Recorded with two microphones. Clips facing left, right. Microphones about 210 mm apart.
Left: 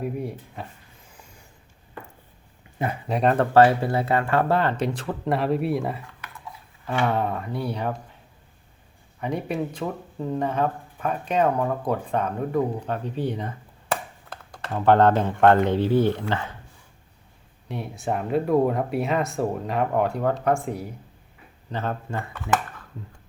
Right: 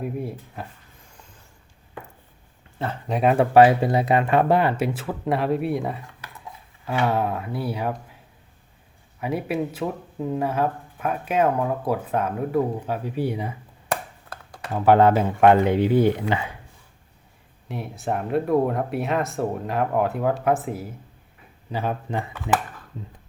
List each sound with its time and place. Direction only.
0.0 s speech: centre (ahead or behind)
2.7 s speech: 10° left (ahead or behind)
3.1 s speech: 5° right (ahead or behind)
9.2 s speech: 5° right (ahead or behind)
17.7 s speech: centre (ahead or behind); by 22.6 s 20° right (ahead or behind)